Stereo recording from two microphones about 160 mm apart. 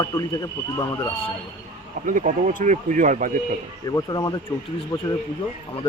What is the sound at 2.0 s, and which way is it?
Speech, 55° right (ahead or behind).